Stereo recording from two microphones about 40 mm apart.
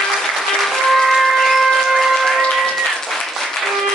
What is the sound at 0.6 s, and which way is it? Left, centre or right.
Applause, centre.